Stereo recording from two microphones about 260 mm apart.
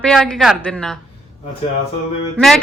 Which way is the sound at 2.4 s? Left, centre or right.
Centre.